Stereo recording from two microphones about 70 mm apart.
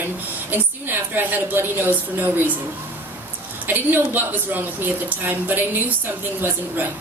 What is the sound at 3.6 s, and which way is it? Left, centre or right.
A woman's voice, right.